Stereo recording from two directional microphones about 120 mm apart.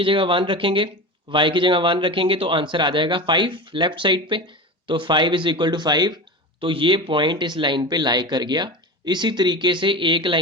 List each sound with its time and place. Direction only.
0.0 s speech: 45° right (ahead or behind)